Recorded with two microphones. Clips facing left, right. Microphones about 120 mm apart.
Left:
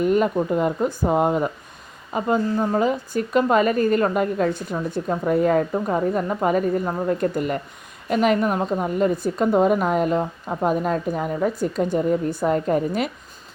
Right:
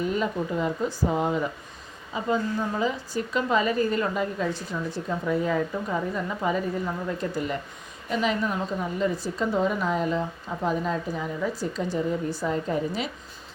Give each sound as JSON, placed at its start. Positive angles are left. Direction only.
{"t": 0.0, "sound": "a woman's voice", "side_deg": 55}